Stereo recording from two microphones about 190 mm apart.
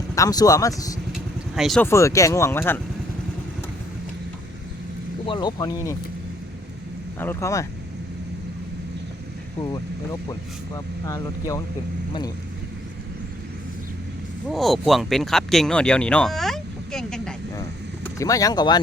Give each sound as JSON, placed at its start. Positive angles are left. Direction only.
{"t": 0.2, "sound": "speech", "side_deg": 20}
{"t": 1.1, "sound": "vehicle", "side_deg": 0}
{"t": 1.8, "sound": "speech", "side_deg": 15}
{"t": 5.2, "sound": "speech", "side_deg": 25}
{"t": 7.2, "sound": "speech", "side_deg": 15}
{"t": 9.6, "sound": "speech", "side_deg": 20}
{"t": 14.4, "sound": "speech", "side_deg": 0}
{"t": 17.6, "sound": "vehicle", "side_deg": 15}